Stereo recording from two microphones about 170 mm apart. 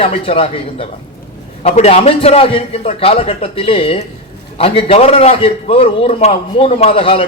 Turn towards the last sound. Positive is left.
turn(degrees=35)  # may be behind; listen again after turning